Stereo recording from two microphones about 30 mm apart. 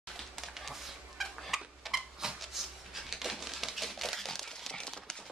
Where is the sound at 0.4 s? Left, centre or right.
Centre.